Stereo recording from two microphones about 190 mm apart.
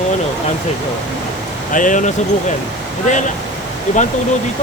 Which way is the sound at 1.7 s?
45° left (ahead or behind).